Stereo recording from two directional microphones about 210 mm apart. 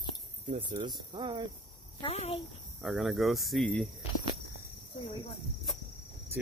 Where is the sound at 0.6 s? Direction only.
20° right (ahead or behind).